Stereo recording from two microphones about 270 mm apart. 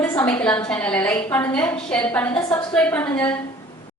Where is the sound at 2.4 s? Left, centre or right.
Centre.